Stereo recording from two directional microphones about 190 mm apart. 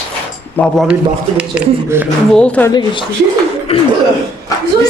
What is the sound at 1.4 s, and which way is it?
Speech, 10° right (ahead or behind).